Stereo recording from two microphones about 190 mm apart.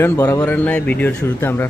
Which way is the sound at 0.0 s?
20° left (ahead or behind).